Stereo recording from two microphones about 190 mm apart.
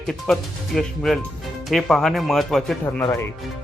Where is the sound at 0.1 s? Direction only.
Centre (ahead or behind).